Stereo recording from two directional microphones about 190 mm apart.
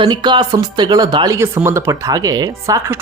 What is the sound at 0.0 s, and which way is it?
Speech, 25° right (ahead or behind).